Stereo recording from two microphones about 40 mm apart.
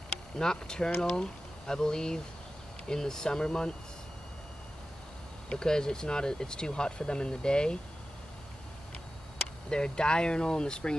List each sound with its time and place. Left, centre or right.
0.4 s speech: centre
5.5 s speech: centre
9.7 s speech: left